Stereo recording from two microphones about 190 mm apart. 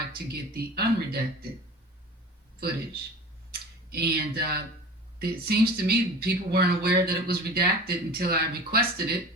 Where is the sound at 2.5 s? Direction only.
55° right (ahead or behind).